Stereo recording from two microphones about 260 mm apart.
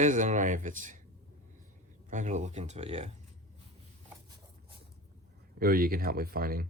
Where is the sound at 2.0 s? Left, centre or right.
Right.